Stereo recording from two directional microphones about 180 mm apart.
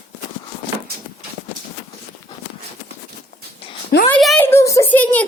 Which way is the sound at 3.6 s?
30° left (ahead or behind).